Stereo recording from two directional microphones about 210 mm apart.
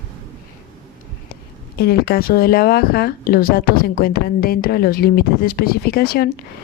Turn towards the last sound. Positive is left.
turn(degrees=50)  # may be behind; listen again after turning